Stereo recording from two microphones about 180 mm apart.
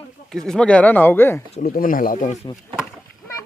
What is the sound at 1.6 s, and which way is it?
Speech, 50° left (ahead or behind).